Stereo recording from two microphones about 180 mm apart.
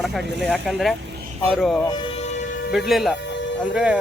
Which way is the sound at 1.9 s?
30° left (ahead or behind).